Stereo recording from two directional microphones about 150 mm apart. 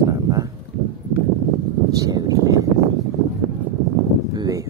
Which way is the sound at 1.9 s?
25° right (ahead or behind).